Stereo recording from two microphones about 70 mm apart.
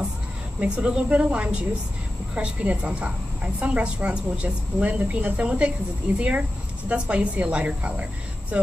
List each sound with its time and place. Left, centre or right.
0.6 s a woman's voice: centre